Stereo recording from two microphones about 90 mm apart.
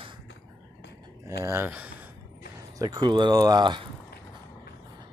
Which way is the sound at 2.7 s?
50° right (ahead or behind).